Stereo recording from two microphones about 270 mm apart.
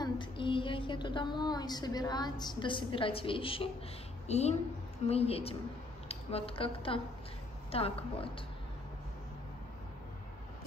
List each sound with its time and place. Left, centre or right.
0.0 s a woman's voice: centre